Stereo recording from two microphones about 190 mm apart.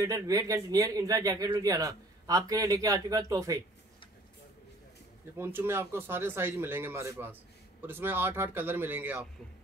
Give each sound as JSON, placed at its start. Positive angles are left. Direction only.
{"t": 0.0, "sound": "speech", "side_deg": -15}
{"t": 5.4, "sound": "speech", "side_deg": -10}